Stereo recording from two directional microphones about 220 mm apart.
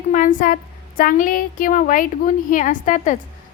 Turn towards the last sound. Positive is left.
turn(degrees=35)  # may be behind; listen again after turning